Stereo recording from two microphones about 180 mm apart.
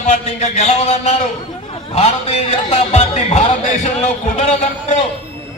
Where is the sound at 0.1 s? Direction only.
40° left (ahead or behind).